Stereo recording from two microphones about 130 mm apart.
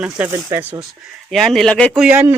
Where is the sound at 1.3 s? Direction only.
Centre (ahead or behind).